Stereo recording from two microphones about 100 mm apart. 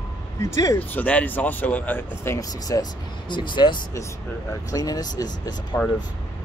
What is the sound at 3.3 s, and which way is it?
Speech, 50° left (ahead or behind).